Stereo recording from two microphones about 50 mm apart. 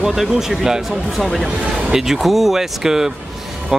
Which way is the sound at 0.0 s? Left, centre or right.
Centre.